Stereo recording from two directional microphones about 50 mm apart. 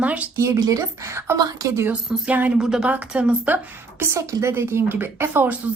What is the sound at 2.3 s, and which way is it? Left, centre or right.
Speech, right.